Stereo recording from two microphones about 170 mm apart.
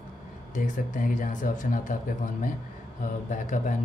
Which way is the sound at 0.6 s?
50° left (ahead or behind).